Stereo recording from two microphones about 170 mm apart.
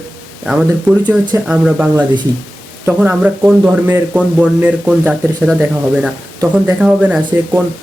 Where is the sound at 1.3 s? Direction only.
5° right (ahead or behind).